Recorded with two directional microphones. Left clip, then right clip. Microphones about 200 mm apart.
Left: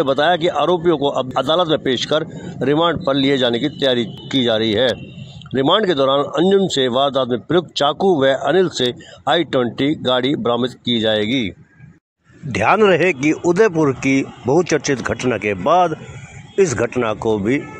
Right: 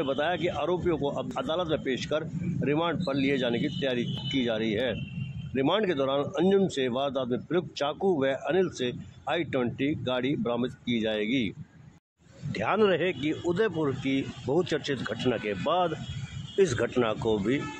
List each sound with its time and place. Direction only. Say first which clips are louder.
0.0 s speech: left 13 dB; 40° left (ahead or behind)
12.5 s speech: left 12 dB; 30° left (ahead or behind)